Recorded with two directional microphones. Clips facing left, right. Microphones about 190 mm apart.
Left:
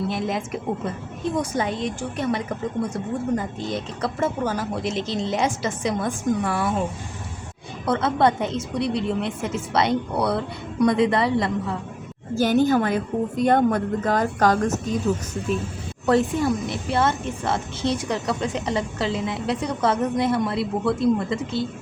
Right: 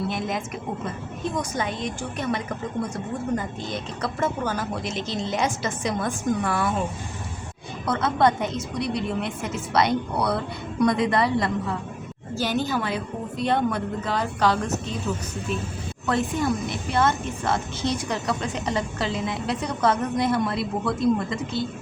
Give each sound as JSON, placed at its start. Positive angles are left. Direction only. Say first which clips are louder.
{"t": 0.1, "sound": "a woman's voice", "louder": "left 3 dB", "side_deg": 30}
{"t": 7.9, "sound": "a woman's voice", "louder": "left 1 dB", "side_deg": 25}
{"t": 12.3, "sound": "a woman's voice", "louder": "left 7 dB", "side_deg": 50}
{"t": 16.0, "sound": "a woman's voice", "louder": "left 4 dB", "side_deg": 35}